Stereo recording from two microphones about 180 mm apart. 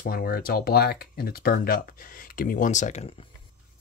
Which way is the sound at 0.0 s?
55° left (ahead or behind).